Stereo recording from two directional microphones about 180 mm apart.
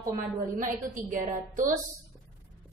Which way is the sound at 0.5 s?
45° right (ahead or behind).